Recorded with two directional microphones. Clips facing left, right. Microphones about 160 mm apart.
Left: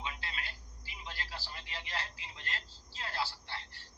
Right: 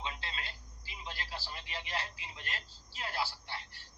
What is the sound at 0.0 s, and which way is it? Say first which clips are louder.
Radio: right 1 dB; 25° right (ahead or behind).